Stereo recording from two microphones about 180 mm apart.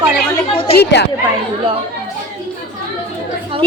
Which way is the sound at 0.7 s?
70° left (ahead or behind).